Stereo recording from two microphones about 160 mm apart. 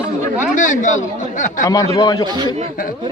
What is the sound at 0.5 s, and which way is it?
Speech, 50° left (ahead or behind).